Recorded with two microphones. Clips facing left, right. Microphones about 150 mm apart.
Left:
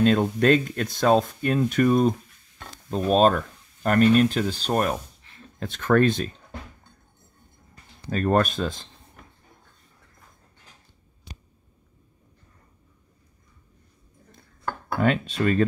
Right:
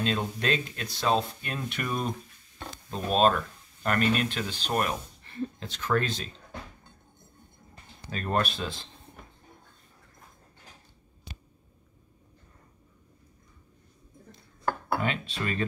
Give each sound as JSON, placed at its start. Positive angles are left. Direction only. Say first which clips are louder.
{"t": 0.0, "sound": "speech", "louder": "left 10 dB", "side_deg": 50}
{"t": 5.6, "sound": "speech", "louder": "left 9 dB", "side_deg": 50}
{"t": 8.1, "sound": "speech", "louder": "left 7 dB", "side_deg": 45}
{"t": 15.0, "sound": "speech", "louder": "left 8 dB", "side_deg": 45}